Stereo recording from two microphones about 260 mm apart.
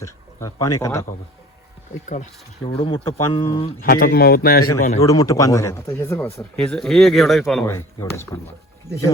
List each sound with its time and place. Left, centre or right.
0.0 s speech: centre
2.6 s a man's voice: left
3.8 s a man's voice: left
5.0 s a man's voice: centre
8.9 s speech: centre